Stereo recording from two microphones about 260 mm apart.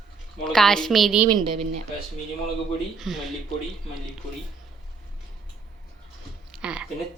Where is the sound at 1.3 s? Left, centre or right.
Centre.